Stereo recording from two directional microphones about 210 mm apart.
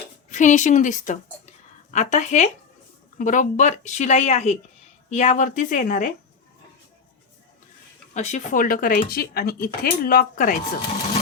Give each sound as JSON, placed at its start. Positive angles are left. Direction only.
{"t": 0.3, "sound": "a woman's voice", "side_deg": 35}
{"t": 8.1, "sound": "speech", "side_deg": 35}